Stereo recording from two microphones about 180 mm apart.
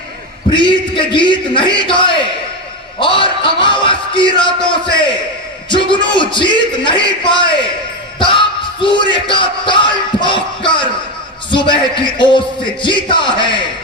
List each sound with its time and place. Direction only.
0.5 s a man's voice: 25° left (ahead or behind)